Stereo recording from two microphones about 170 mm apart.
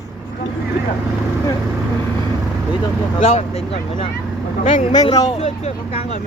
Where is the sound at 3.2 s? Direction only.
35° left (ahead or behind).